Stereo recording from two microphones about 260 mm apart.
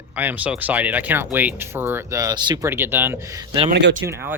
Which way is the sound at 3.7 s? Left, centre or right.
Right.